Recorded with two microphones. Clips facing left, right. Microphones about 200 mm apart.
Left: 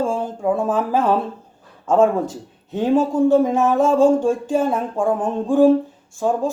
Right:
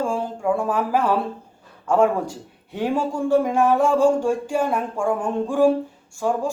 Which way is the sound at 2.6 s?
20° left (ahead or behind).